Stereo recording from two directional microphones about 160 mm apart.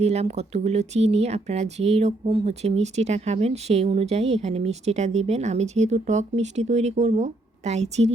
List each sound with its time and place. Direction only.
0.0 s speech: 40° right (ahead or behind)